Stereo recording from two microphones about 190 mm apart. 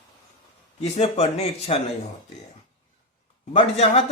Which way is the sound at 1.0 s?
30° left (ahead or behind).